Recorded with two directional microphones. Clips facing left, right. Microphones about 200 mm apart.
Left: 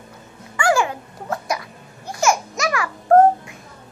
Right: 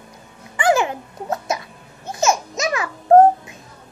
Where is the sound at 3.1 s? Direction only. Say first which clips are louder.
Right 2 dB; 20° right (ahead or behind).